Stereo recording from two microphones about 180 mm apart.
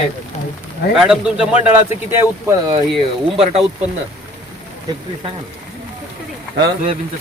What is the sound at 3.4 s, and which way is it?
Speech, 35° right (ahead or behind).